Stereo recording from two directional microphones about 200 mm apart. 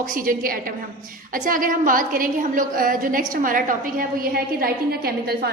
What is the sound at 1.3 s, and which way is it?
A woman's voice, 45° right (ahead or behind).